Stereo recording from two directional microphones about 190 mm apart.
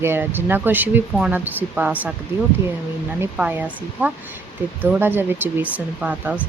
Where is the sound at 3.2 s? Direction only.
10° right (ahead or behind).